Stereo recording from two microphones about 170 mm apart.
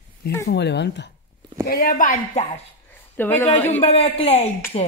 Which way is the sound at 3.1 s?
10° left (ahead or behind).